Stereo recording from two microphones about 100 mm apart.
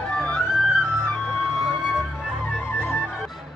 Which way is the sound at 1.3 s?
Centre (ahead or behind).